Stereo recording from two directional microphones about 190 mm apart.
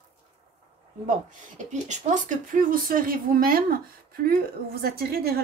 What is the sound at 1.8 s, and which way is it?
Speech, 40° right (ahead or behind).